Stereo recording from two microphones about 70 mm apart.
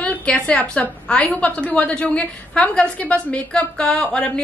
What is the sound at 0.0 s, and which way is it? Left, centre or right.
A woman's voice, left.